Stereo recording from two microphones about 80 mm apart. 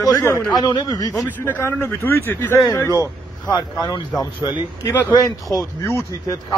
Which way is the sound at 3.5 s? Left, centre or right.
Left.